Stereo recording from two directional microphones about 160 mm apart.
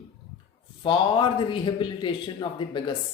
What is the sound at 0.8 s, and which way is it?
Speech, 30° left (ahead or behind).